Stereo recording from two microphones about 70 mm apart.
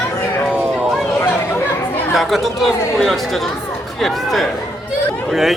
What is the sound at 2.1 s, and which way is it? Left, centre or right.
A man's voice, centre.